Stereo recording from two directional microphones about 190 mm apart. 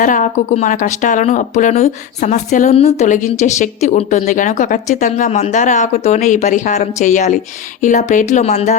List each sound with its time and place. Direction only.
0.0 s speech: 45° left (ahead or behind)